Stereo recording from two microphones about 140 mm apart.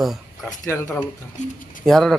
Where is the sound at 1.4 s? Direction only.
70° left (ahead or behind).